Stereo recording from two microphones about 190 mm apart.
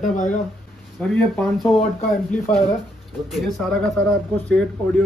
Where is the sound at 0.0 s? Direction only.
40° left (ahead or behind).